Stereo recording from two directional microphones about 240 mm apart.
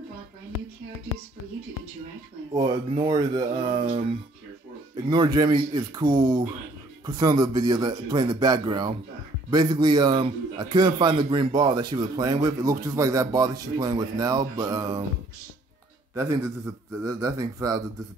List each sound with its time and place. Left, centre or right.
2.5 s a man's voice: centre
16.2 s a man's voice: centre